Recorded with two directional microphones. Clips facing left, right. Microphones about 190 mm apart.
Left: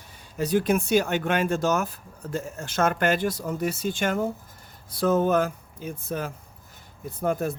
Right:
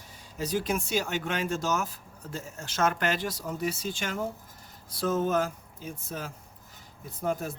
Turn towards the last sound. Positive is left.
turn(degrees=60)  # may be behind; listen again after turning